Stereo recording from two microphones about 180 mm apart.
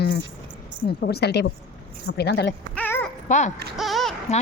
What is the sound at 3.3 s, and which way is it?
Speech, 40° left (ahead or behind).